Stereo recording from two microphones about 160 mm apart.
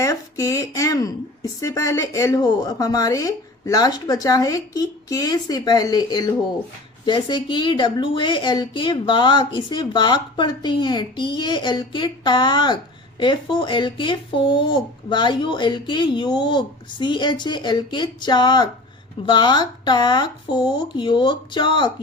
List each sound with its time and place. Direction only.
0.0 s a woman's voice: 20° left (ahead or behind)